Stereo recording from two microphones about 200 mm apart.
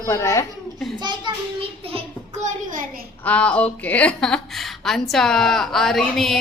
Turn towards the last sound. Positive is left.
turn(degrees=0)  # may be behind; listen again after turning